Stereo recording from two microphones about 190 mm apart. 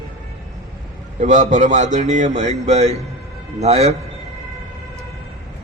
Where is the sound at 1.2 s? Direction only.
40° right (ahead or behind).